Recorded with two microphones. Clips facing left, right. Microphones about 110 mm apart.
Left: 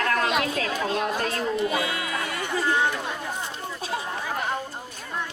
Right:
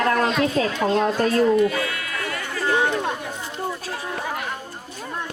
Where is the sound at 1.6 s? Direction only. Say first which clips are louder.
Right 4 dB; 20° left (ahead or behind).